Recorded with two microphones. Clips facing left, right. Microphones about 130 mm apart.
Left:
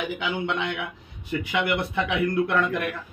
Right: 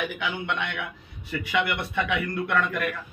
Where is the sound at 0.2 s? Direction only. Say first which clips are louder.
Left 2 dB; 25° left (ahead or behind).